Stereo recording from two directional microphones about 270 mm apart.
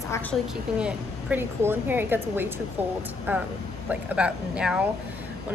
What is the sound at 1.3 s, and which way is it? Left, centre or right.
A woman's voice, centre.